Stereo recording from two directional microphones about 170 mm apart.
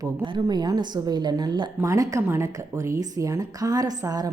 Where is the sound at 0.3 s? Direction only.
25° right (ahead or behind).